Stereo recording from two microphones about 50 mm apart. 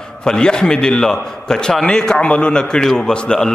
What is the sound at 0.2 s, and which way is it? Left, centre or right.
A man's voice, centre.